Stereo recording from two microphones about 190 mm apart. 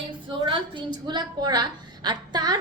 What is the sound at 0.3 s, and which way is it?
A woman's voice, 25° right (ahead or behind).